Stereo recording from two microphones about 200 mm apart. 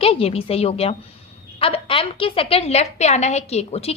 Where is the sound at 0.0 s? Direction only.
30° left (ahead or behind).